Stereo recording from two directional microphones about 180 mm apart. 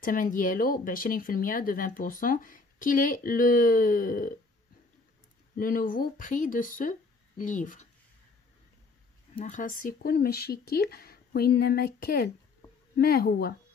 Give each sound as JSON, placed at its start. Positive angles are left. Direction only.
{"t": 0.0, "sound": "speech", "side_deg": 50}
{"t": 5.6, "sound": "speech", "side_deg": 50}
{"t": 9.4, "sound": "speech", "side_deg": 45}